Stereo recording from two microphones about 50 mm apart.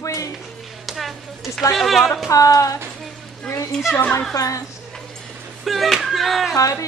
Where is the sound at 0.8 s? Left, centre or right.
Centre.